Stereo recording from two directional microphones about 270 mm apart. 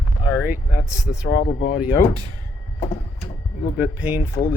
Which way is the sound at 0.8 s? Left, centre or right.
Centre.